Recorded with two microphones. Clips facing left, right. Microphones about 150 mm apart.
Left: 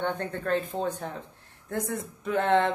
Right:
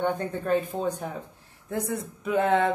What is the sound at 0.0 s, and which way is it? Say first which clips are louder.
Speech: right 3 dB; 10° right (ahead or behind).